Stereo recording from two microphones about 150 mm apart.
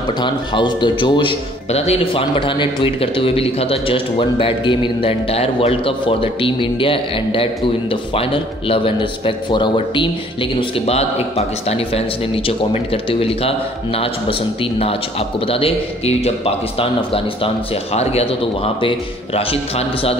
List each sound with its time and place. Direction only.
0.2 s a man's voice: 30° left (ahead or behind)
1.7 s a man's voice: 45° left (ahead or behind)